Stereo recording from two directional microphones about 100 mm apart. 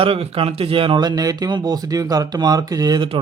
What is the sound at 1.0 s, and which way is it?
Speech, 40° right (ahead or behind).